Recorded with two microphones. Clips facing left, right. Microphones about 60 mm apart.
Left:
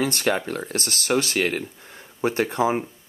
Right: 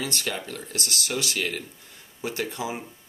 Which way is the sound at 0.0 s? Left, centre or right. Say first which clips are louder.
Left 8 dB; left.